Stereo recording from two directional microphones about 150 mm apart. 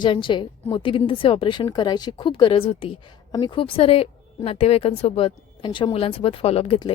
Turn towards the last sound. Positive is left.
turn(degrees=40)  # may be behind; listen again after turning